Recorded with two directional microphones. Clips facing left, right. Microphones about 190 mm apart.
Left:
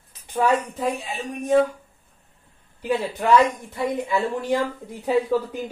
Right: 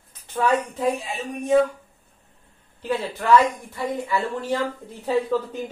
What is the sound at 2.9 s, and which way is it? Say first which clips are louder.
Speech: even; 15° left (ahead or behind).